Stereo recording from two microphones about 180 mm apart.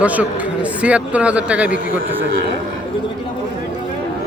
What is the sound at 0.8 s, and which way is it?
A man's voice, 5° right (ahead or behind).